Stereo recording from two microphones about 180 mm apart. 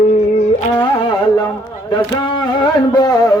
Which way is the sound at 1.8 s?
25° left (ahead or behind).